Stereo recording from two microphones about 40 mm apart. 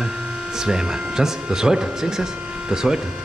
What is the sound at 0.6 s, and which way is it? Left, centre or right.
Speech, centre.